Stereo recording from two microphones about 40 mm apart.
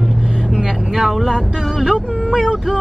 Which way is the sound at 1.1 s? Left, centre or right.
Centre.